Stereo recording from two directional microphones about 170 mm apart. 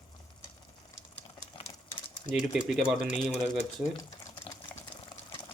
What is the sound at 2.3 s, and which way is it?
Speech, 5° right (ahead or behind).